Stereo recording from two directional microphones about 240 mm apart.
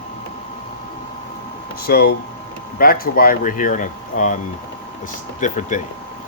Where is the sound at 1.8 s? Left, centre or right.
Left.